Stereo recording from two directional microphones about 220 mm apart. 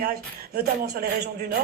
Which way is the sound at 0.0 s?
45° right (ahead or behind).